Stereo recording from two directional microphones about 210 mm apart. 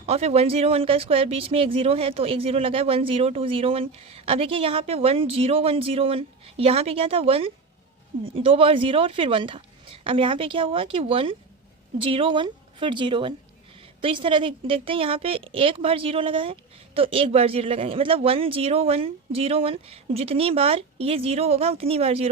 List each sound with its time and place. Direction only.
0.0 s speech: 30° right (ahead or behind)